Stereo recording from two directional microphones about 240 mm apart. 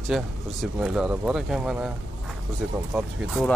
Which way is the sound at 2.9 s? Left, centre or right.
Centre.